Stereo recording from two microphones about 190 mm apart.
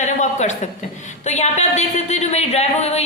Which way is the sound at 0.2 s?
40° left (ahead or behind).